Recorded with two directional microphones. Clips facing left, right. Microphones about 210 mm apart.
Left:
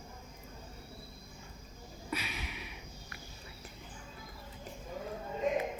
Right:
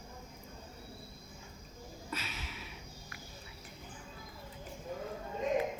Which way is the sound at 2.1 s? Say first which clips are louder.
Left 4 dB; 15° left (ahead or behind).